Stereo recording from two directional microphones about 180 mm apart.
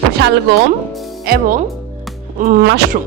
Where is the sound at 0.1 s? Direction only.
65° right (ahead or behind).